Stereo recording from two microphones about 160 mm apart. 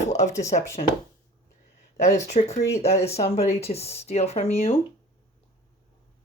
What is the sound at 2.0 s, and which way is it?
Speech, 40° left (ahead or behind).